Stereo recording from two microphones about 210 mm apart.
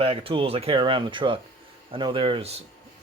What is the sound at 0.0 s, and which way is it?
Speech, 25° right (ahead or behind).